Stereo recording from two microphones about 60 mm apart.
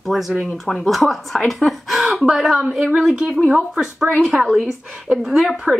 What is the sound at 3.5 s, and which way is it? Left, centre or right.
Speech, centre.